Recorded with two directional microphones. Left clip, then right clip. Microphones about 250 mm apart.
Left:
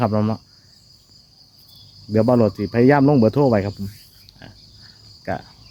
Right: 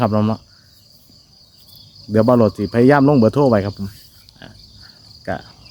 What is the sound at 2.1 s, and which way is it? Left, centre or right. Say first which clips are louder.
Speech: right 3 dB; centre.